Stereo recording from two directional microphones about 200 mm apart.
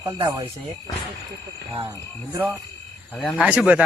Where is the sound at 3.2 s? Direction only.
Centre (ahead or behind).